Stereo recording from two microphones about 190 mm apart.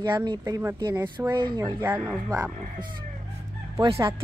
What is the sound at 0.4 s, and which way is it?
Speech, 15° right (ahead or behind).